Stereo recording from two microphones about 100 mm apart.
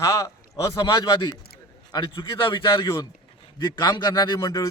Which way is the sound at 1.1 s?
45° left (ahead or behind).